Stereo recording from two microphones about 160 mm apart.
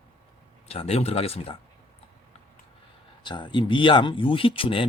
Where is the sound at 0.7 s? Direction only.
40° left (ahead or behind).